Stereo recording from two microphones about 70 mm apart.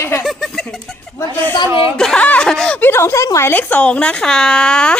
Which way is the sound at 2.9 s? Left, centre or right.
Left.